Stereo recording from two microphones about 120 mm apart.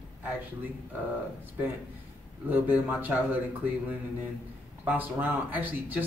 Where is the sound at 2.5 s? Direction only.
15° right (ahead or behind).